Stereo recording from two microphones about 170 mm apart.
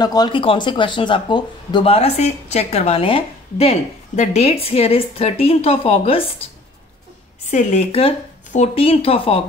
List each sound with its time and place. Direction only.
0.0 s speech: 25° left (ahead or behind)
7.5 s speech: 40° left (ahead or behind)